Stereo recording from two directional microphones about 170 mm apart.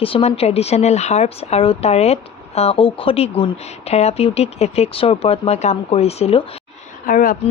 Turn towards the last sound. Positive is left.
turn(degrees=55)  # may be behind; listen again after turning